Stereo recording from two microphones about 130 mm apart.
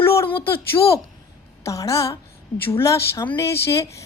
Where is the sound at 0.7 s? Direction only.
40° left (ahead or behind).